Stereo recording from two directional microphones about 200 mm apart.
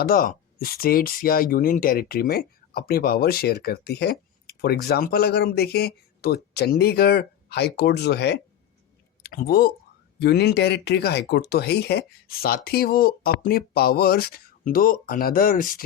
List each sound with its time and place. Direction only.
0.0 s speech: 45° left (ahead or behind)